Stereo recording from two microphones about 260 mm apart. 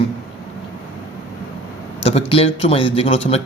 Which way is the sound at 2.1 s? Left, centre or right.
Left.